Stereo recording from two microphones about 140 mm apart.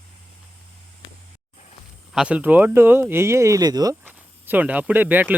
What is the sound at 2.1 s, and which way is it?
Speech, 10° right (ahead or behind).